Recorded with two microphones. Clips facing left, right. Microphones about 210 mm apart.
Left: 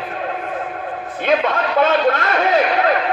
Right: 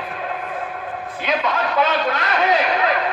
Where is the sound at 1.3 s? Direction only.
50° left (ahead or behind).